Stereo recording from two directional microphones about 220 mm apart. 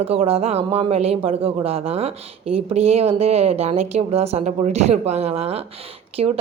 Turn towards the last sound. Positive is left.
turn(degrees=-30)  # may be behind; listen again after turning